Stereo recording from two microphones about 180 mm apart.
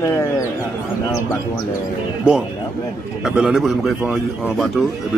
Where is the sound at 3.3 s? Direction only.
5° right (ahead or behind).